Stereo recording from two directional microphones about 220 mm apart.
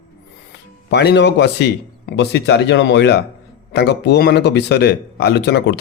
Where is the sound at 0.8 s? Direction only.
50° left (ahead or behind).